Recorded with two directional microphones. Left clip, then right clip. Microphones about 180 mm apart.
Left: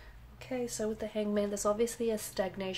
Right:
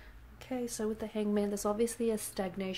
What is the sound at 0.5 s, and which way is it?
Speech, 30° right (ahead or behind).